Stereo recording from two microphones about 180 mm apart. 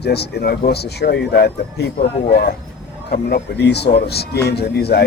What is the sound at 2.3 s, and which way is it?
Speech, 45° left (ahead or behind).